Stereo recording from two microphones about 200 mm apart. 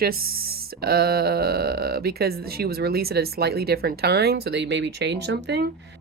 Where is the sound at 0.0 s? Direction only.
50° right (ahead or behind).